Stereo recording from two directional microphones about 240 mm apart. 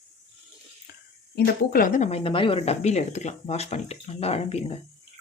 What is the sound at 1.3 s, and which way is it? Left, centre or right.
Speech, left.